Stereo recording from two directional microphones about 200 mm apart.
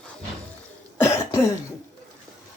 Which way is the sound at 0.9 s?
15° left (ahead or behind).